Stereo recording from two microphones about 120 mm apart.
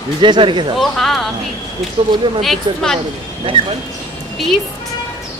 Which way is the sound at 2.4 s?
Centre (ahead or behind).